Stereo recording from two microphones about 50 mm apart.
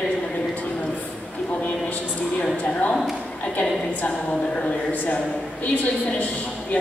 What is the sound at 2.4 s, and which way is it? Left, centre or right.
Speech, left.